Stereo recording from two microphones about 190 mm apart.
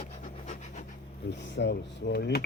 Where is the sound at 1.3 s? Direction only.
65° left (ahead or behind).